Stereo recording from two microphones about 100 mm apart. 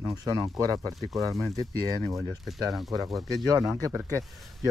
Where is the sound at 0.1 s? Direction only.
40° right (ahead or behind).